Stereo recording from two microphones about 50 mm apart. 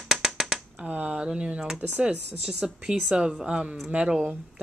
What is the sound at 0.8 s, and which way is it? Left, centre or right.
Speech, right.